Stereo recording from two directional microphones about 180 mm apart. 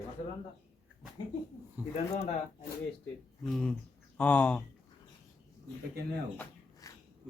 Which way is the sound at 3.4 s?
5° left (ahead or behind).